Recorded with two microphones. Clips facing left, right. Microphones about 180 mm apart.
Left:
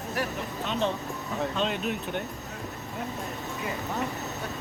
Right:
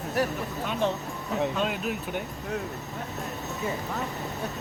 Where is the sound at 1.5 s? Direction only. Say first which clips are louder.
Even; 5° right (ahead or behind).